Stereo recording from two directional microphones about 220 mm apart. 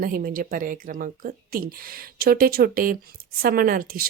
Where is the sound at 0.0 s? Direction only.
40° right (ahead or behind).